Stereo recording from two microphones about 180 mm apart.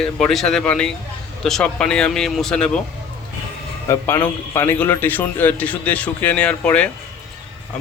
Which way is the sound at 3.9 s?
15° left (ahead or behind).